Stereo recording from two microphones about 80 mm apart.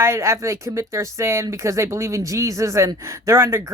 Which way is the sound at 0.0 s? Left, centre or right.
Right.